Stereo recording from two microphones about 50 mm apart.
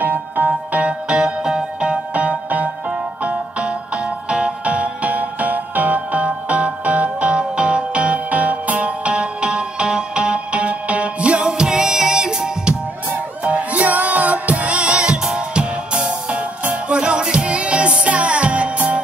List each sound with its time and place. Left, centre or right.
0.5 s music: right
13.4 s music: right